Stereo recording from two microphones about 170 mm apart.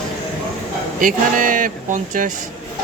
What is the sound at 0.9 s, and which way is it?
Speech, 55° right (ahead or behind).